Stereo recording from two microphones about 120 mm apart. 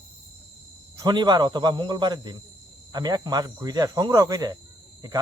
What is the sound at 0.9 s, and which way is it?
Speech, 35° right (ahead or behind).